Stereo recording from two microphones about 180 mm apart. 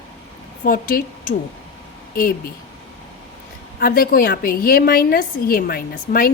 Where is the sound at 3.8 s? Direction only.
55° left (ahead or behind).